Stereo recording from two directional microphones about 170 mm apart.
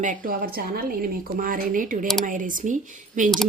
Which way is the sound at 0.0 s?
55° right (ahead or behind).